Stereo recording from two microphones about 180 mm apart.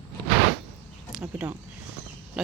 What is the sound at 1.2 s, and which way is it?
Speech, 5° right (ahead or behind).